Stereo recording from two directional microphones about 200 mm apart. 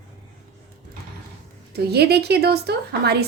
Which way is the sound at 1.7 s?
55° right (ahead or behind).